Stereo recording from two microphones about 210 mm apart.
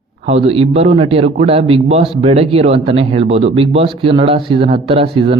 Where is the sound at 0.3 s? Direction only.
30° right (ahead or behind).